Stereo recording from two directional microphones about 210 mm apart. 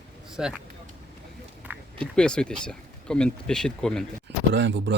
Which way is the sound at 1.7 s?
10° right (ahead or behind).